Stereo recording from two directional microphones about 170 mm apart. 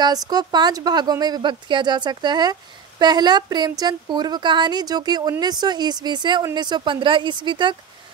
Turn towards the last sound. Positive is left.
turn(degrees=-30)  # may be behind; listen again after turning